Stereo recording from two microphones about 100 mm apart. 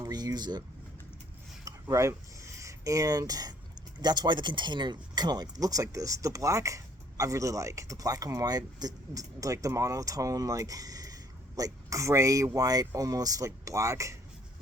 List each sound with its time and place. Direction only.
0.0 s speech: 40° right (ahead or behind)
1.6 s speech: 30° right (ahead or behind)